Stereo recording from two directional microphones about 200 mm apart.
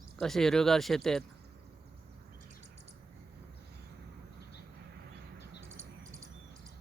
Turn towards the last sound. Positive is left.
turn(degrees=-15)  # may be behind; listen again after turning